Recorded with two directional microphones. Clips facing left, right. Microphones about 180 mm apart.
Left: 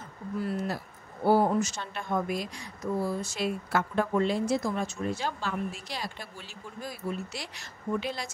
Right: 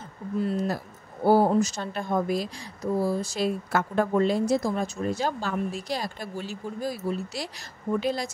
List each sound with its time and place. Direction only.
0.4 s speech: 25° right (ahead or behind)
1.2 s speech: 35° right (ahead or behind)